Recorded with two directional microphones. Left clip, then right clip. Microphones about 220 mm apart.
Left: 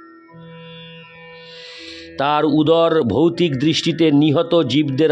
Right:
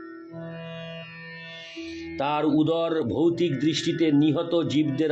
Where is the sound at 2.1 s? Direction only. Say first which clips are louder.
Left 7 dB; 50° left (ahead or behind).